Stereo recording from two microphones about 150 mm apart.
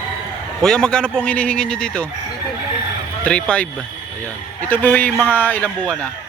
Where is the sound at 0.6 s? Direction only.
5° left (ahead or behind).